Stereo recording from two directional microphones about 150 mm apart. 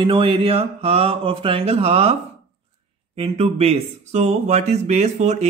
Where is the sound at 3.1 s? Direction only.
45° right (ahead or behind).